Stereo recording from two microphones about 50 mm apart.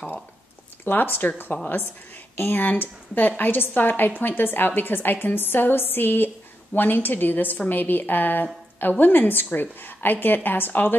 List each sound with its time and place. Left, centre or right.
0.8 s a woman's voice: left